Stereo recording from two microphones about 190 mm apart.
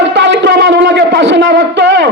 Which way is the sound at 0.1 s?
65° right (ahead or behind).